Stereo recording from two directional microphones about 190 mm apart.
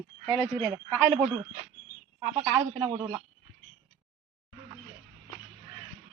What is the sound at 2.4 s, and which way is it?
Speech, 15° right (ahead or behind).